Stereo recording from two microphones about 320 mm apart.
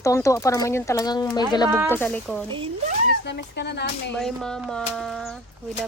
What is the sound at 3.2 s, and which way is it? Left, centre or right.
Speech, left.